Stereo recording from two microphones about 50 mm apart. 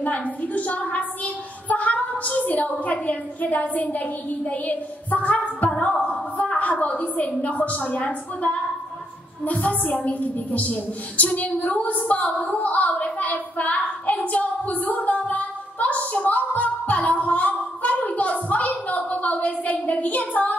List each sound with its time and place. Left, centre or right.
0.0 s a woman's voice: left
15.2 s music: left